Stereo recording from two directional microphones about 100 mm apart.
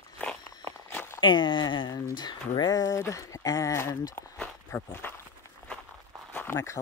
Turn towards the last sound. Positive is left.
turn(degrees=25)  # may be behind; listen again after turning